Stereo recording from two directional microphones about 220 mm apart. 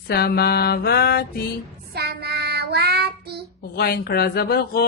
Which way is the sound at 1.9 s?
45° right (ahead or behind).